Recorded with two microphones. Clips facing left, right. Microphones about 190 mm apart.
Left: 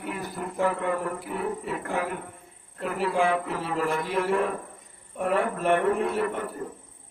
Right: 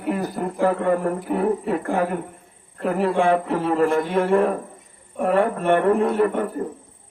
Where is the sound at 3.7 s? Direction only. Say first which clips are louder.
Right 8 dB; 50° right (ahead or behind).